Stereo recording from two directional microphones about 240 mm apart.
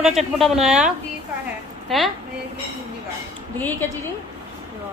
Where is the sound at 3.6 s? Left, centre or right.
Centre.